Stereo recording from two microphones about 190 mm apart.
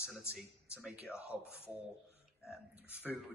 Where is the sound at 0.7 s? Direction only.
5° right (ahead or behind).